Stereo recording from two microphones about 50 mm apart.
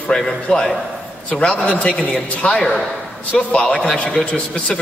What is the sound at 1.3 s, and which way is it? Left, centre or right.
A man's voice, left.